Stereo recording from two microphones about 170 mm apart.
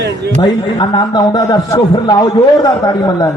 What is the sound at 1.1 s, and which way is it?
A man's voice, 25° left (ahead or behind).